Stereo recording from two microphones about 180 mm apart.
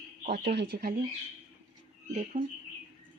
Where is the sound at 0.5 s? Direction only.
60° right (ahead or behind).